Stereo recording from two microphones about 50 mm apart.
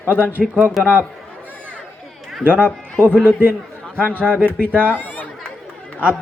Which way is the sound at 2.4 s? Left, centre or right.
Right.